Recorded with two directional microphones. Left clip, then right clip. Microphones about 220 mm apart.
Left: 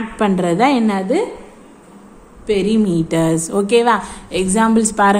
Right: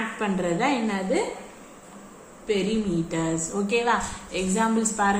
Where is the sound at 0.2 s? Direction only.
50° left (ahead or behind).